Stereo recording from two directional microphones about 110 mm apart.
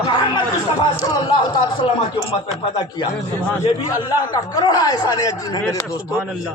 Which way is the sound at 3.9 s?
35° left (ahead or behind).